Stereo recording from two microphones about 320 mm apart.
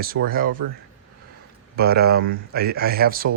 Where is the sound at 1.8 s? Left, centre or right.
Right.